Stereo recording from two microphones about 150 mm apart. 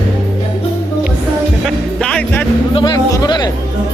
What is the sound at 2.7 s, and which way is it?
Speech, 30° left (ahead or behind).